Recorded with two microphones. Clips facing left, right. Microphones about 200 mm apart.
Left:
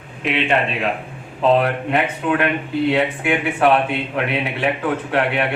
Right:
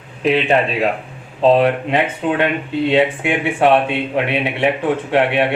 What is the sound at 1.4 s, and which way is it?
Speech, 25° right (ahead or behind).